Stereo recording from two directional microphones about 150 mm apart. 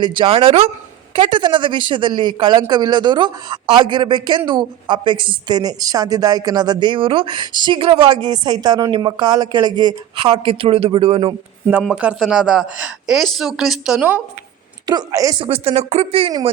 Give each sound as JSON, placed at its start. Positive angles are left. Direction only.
{"t": 0.0, "sound": "speech", "side_deg": -30}
{"t": 11.8, "sound": "speech", "side_deg": -5}
{"t": 14.8, "sound": "speech", "side_deg": -25}
{"t": 15.4, "sound": "speech", "side_deg": -40}